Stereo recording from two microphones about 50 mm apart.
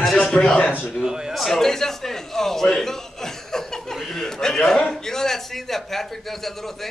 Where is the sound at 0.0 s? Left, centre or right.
Centre.